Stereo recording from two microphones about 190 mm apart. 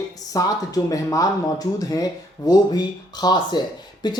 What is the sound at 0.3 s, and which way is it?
Speech, 20° left (ahead or behind).